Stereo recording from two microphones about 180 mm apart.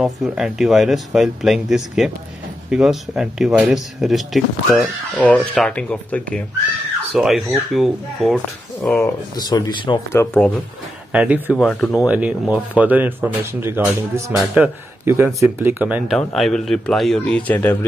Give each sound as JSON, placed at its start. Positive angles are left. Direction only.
{"t": 0.0, "sound": "speech", "side_deg": 0}
{"t": 8.9, "sound": "speech", "side_deg": 20}
{"t": 10.1, "sound": "speech", "side_deg": 10}
{"t": 11.1, "sound": "speech", "side_deg": -10}
{"t": 11.5, "sound": "speech", "side_deg": 5}
{"t": 12.1, "sound": "speech", "side_deg": -5}
{"t": 16.2, "sound": "speech", "side_deg": 5}